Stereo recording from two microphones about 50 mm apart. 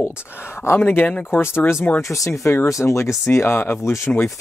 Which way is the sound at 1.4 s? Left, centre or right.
Left.